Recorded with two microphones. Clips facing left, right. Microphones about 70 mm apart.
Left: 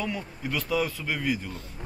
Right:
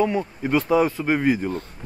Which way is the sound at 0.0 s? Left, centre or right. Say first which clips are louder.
Right 10 dB; right.